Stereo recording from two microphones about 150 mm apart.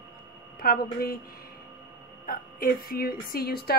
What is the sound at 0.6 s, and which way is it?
Speech, 80° left.